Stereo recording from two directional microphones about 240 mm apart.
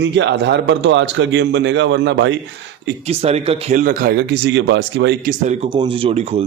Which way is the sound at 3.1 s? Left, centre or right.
Right.